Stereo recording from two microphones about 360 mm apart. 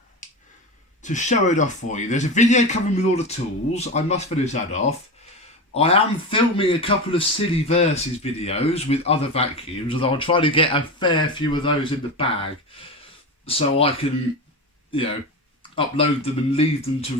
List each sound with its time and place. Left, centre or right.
1.0 s speech: centre
13.4 s speech: centre
15.7 s speech: centre